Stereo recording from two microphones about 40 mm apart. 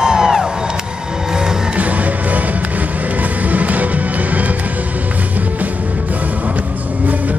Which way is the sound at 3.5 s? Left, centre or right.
Right.